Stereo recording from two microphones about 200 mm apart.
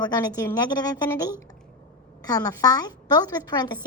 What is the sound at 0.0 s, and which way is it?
A woman's voice, 15° left (ahead or behind).